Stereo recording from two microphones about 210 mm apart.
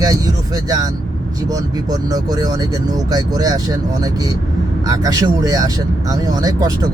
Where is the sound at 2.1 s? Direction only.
15° right (ahead or behind).